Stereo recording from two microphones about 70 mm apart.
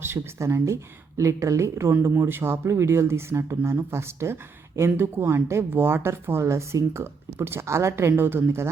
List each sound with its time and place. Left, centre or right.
0.0 s speech: right
1.9 s speech: right